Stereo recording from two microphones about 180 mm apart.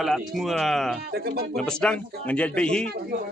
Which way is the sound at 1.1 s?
60° right (ahead or behind).